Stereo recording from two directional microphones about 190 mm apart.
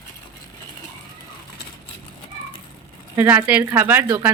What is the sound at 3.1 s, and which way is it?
Speech, 10° right (ahead or behind).